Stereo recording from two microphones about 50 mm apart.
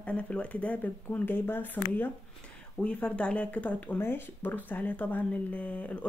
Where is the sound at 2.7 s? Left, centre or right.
Left.